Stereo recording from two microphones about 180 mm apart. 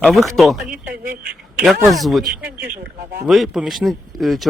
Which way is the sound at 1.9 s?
Centre (ahead or behind).